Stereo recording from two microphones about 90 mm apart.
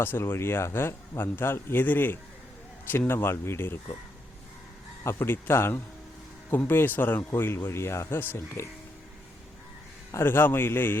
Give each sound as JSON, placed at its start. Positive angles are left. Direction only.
{"t": 0.0, "sound": "speech", "side_deg": 25}
{"t": 5.0, "sound": "speech", "side_deg": 25}
{"t": 10.1, "sound": "speech", "side_deg": 25}